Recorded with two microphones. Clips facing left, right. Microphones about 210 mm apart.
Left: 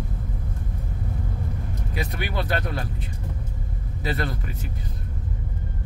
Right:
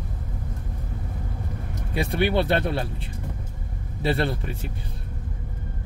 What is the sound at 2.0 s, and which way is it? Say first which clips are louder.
Speech: right 8 dB; 30° right (ahead or behind).